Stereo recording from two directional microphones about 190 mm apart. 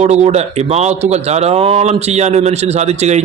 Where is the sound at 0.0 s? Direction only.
35° right (ahead or behind).